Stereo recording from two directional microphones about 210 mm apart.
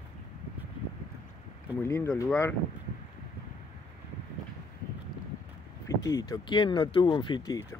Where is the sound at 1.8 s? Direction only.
10° left (ahead or behind).